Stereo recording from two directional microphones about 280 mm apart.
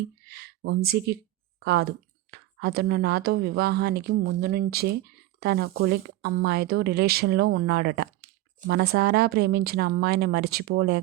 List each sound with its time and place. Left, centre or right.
0.3 s speech: right